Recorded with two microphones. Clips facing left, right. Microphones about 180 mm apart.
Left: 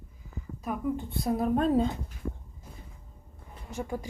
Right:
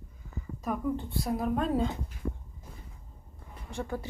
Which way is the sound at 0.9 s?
25° left (ahead or behind).